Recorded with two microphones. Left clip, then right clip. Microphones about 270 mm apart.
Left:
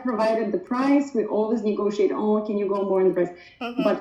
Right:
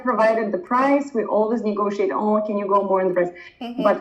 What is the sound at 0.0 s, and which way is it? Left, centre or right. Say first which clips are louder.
A man's voice: right 4 dB; centre.